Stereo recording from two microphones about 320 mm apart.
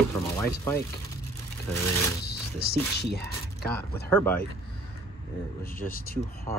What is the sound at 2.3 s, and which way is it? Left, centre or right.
Music, left.